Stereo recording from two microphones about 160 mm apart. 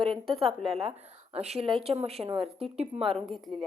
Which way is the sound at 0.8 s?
40° right (ahead or behind).